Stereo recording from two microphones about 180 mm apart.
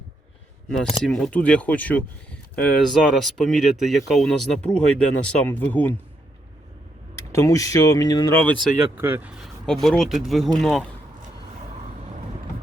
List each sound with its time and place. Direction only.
0.7 s speech: centre (ahead or behind)
7.3 s speech: 20° left (ahead or behind)
9.0 s speech: 10° right (ahead or behind)
9.6 s speech: centre (ahead or behind)